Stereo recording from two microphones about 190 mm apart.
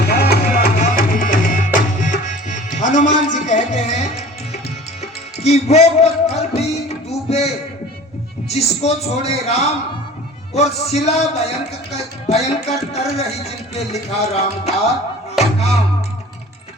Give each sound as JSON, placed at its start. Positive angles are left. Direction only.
{"t": 0.0, "sound": "music", "side_deg": 55}
{"t": 5.4, "sound": "music", "side_deg": 35}
{"t": 8.4, "sound": "a man's voice", "side_deg": 35}
{"t": 15.4, "sound": "music", "side_deg": 35}